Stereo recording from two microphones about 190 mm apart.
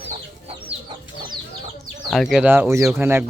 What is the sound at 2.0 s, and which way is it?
Speech, centre (ahead or behind).